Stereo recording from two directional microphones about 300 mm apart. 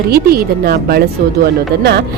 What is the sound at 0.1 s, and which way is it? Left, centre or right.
Speech, right.